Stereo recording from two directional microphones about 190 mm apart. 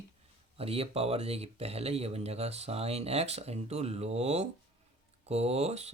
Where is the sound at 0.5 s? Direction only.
30° right (ahead or behind).